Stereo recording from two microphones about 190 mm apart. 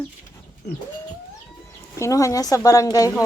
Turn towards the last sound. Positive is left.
turn(degrees=15)  # may be behind; listen again after turning